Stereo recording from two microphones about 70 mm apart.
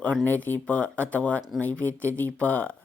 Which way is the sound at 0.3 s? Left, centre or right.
Left.